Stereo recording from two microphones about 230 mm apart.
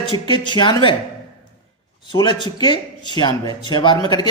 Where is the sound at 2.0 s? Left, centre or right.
Centre.